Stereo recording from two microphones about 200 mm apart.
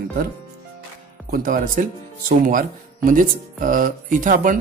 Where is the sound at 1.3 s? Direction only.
45° right (ahead or behind).